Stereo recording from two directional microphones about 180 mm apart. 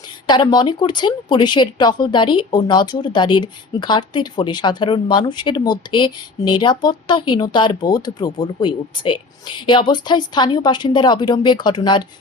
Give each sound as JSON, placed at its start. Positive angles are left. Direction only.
{"t": 0.3, "sound": "a woman's voice", "side_deg": 25}